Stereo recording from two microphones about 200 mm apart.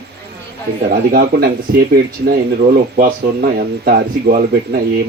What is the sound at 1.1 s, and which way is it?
Speech, 50° right (ahead or behind).